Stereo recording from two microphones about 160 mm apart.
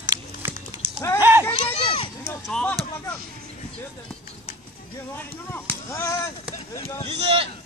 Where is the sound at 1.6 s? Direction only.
35° left (ahead or behind).